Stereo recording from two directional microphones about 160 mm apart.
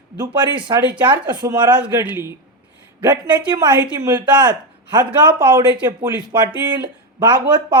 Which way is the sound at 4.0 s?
15° right (ahead or behind).